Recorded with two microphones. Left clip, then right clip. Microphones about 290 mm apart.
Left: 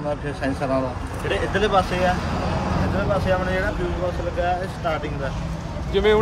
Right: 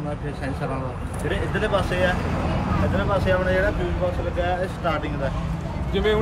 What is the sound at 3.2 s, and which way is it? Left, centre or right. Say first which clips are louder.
A man's voice: right 1 dB; centre.